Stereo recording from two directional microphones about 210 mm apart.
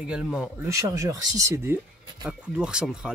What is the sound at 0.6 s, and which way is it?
Speech, 15° right (ahead or behind).